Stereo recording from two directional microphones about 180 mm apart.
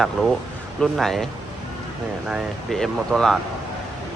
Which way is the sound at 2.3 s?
Centre (ahead or behind).